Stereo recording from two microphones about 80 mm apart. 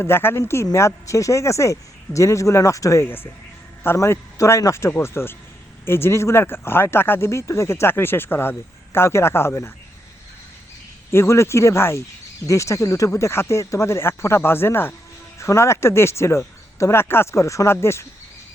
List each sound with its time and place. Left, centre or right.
0.0 s speech: left
11.1 s speech: left